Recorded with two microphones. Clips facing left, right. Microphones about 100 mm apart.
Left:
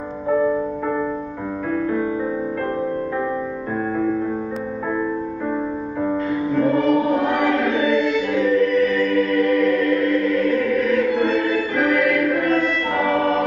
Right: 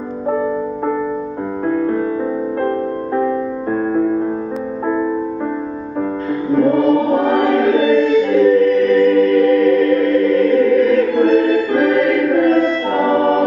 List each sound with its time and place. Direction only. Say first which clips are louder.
6.5 s music: right 5 dB; 40° right (ahead or behind)
7.9 s choir: right 7 dB; 35° right (ahead or behind)